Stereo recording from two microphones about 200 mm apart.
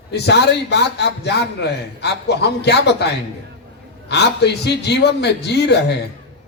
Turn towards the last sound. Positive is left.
turn(degrees=55)  # may be behind; listen again after turning